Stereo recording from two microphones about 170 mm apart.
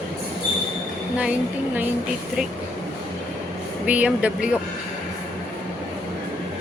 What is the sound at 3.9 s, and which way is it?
Speech, 10° right (ahead or behind).